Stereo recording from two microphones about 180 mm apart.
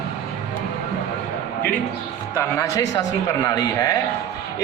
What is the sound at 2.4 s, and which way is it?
Speech, 15° left (ahead or behind).